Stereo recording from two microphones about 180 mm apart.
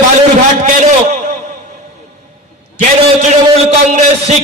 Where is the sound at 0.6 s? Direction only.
40° right (ahead or behind).